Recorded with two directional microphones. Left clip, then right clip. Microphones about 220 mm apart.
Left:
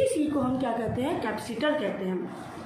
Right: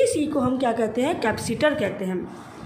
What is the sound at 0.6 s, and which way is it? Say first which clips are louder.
A woman's voice: right 6 dB; 50° right (ahead or behind).